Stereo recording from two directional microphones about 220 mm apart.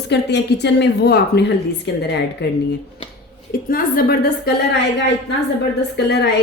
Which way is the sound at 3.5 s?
40° left (ahead or behind).